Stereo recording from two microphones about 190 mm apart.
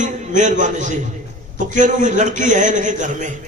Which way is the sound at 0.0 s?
40° right (ahead or behind).